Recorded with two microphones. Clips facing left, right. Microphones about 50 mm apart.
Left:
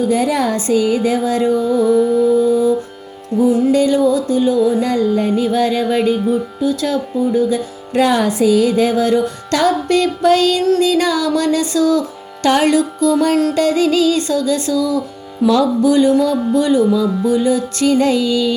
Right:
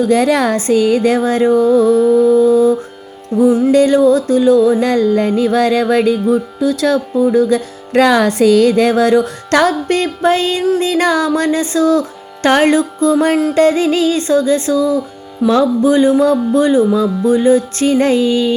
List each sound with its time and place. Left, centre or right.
0.1 s a woman's voice: right
0.5 s music: right
3.3 s music: centre
3.7 s music: right
6.6 s music: right
9.9 s music: right